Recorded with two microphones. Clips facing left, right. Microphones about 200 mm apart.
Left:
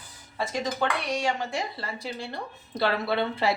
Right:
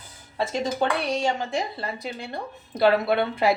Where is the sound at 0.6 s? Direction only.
30° right (ahead or behind).